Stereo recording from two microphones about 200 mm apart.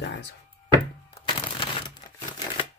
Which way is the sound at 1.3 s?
25° left (ahead or behind).